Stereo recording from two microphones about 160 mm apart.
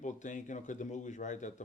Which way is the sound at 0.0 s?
50° left (ahead or behind).